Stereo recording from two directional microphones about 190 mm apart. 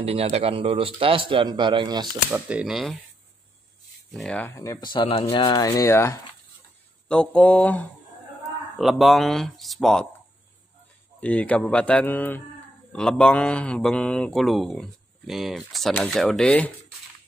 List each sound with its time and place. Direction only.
0.0 s a man's voice: 30° right (ahead or behind)
2.3 s speech: 5° right (ahead or behind)
4.1 s speech: 5° left (ahead or behind)
4.6 s speech: 20° left (ahead or behind); by 10.0 s centre (ahead or behind)
11.1 s speech: 5° left (ahead or behind)